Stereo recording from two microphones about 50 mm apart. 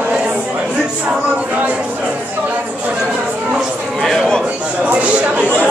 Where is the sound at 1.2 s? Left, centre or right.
Right.